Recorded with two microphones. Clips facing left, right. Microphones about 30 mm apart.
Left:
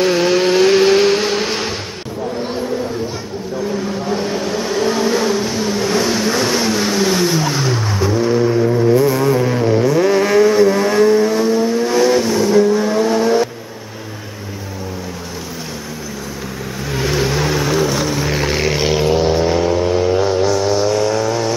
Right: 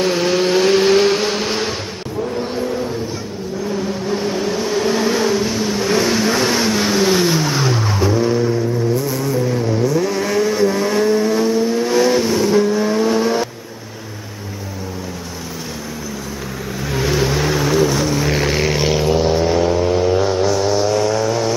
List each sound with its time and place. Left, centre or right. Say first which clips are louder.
0.0 s vehicle: left 2 dB; centre
4.1 s vehicle: even; centre
8.4 s vehicle: left 3 dB; centre
8.9 s vehicle: left 6 dB; left; by 13.5 s centre
16.9 s vehicle: even; centre